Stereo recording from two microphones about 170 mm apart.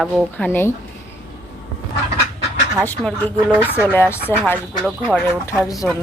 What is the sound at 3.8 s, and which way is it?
Speech, 15° left (ahead or behind).